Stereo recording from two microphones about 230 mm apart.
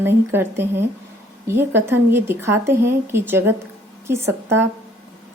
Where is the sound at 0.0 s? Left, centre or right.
Centre.